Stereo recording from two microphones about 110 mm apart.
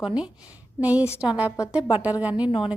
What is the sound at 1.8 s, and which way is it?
Speech, 50° left (ahead or behind).